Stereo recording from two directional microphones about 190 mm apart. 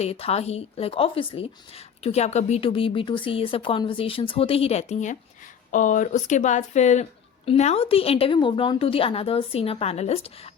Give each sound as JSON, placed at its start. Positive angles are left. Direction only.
{"t": 0.0, "sound": "speech", "side_deg": 30}